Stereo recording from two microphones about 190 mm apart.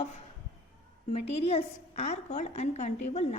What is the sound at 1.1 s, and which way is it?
A woman's voice, 30° left (ahead or behind).